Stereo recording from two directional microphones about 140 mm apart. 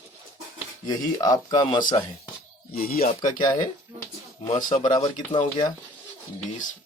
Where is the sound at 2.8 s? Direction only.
90° left.